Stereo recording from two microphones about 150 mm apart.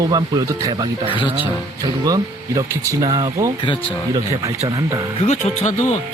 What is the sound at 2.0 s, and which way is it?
Speech, 25° right (ahead or behind).